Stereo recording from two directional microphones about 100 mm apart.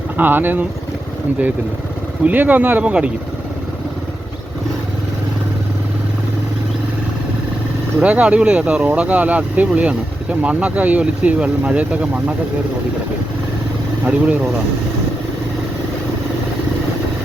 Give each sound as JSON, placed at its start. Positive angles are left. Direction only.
{"t": 0.2, "sound": "speech", "side_deg": -20}
{"t": 2.2, "sound": "speech", "side_deg": -15}
{"t": 7.9, "sound": "speech", "side_deg": -15}
{"t": 14.0, "sound": "speech", "side_deg": -15}